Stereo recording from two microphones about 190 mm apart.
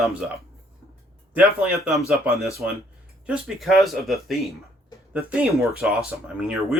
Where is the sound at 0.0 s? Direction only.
5° right (ahead or behind).